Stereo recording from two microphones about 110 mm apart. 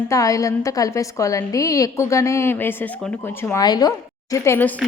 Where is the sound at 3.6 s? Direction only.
35° left (ahead or behind); by 4.7 s 20° left (ahead or behind).